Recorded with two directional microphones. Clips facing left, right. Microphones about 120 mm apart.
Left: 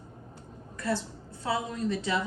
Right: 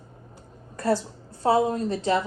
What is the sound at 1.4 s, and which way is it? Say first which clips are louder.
Speech: right 9 dB; 45° right (ahead or behind).